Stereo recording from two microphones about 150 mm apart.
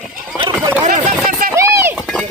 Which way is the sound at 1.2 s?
75° right (ahead or behind).